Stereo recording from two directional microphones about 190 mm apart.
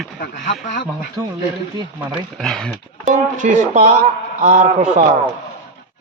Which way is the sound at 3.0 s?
40° right (ahead or behind).